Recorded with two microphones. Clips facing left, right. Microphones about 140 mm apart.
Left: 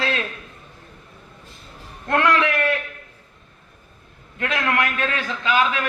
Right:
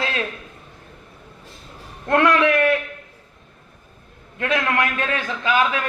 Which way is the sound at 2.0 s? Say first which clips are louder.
Right 3 dB; 20° right (ahead or behind).